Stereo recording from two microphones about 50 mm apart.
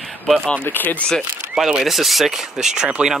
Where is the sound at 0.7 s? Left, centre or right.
Left.